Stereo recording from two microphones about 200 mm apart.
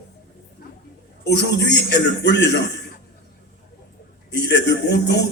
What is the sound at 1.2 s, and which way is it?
A man's voice, 60° left (ahead or behind).